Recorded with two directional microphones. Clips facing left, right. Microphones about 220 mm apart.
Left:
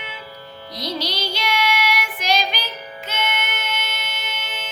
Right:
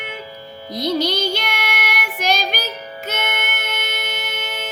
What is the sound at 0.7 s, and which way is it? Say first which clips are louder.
Child singing: right 8 dB; 50° right (ahead or behind).